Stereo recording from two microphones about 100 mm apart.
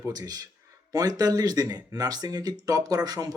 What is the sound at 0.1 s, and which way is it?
Speech, 40° right (ahead or behind).